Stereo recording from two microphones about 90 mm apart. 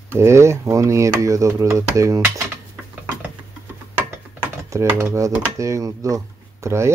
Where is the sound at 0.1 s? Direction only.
30° right (ahead or behind).